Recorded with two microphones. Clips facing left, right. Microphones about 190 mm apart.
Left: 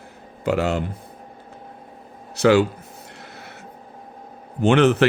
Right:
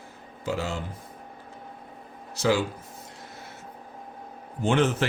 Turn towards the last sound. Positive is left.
turn(degrees=70)  # may be behind; listen again after turning